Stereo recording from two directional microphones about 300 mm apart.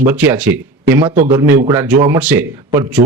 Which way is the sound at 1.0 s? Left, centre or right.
Centre.